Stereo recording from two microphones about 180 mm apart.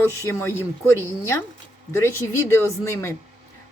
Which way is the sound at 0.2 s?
15° left (ahead or behind).